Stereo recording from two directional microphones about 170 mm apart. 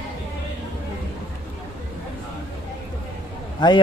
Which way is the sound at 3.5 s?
25° left (ahead or behind).